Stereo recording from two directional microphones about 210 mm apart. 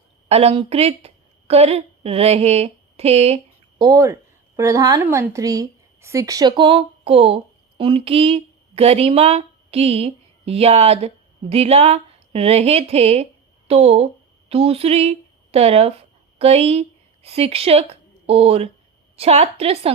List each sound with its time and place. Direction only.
0.3 s a woman's voice: 30° right (ahead or behind)
3.8 s a woman's voice: 15° right (ahead or behind)